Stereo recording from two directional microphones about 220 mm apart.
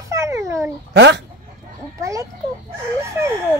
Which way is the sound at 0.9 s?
50° right (ahead or behind).